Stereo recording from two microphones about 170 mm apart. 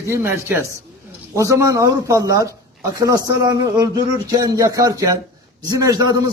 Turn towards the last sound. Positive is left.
turn(degrees=-20)  # may be behind; listen again after turning